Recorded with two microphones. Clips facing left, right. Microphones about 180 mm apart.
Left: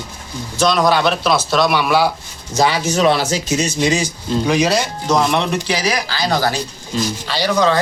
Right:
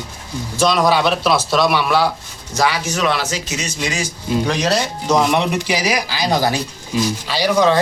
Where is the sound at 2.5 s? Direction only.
25° left (ahead or behind).